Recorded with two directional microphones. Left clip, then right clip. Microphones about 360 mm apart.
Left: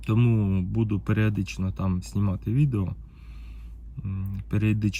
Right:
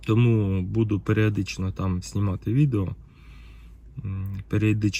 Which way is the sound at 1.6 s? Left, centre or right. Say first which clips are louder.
Right 1 dB; right.